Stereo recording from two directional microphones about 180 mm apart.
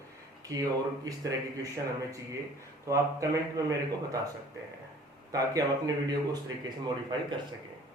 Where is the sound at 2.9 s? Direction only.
20° right (ahead or behind).